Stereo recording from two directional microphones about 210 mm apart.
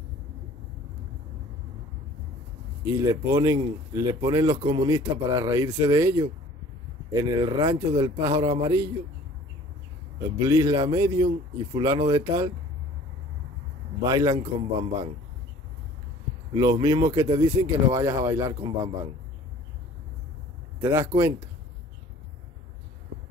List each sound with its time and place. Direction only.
2.8 s speech: 20° right (ahead or behind)
10.1 s speech: 15° right (ahead or behind)
14.0 s speech: 15° right (ahead or behind)
14.3 s speech: 25° right (ahead or behind)
16.5 s speech: 20° right (ahead or behind)
20.8 s speech: 15° right (ahead or behind)